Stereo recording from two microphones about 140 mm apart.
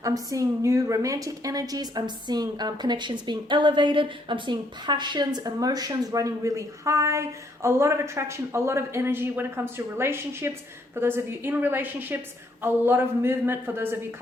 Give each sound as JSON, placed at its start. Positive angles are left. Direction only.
{"t": 0.0, "sound": "a woman's voice", "side_deg": -25}